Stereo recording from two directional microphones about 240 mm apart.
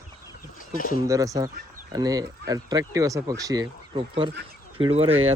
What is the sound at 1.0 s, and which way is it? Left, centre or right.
Speech, centre.